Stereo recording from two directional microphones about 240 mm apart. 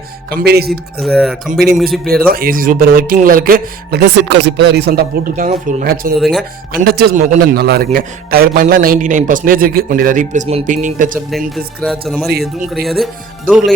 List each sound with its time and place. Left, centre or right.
0.3 s speech: right
0.7 s speech: centre
2.3 s speech: right
6.1 s speech: centre
6.7 s speech: right
11.3 s speech: centre